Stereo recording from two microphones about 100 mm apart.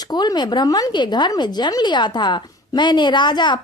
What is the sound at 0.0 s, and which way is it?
A woman's voice, 45° left (ahead or behind).